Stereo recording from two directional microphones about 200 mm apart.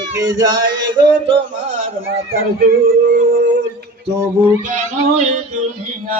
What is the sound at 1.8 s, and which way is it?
Music, 45° right (ahead or behind).